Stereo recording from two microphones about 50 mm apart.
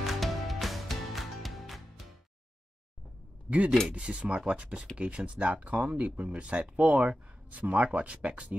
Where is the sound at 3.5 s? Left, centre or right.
Right.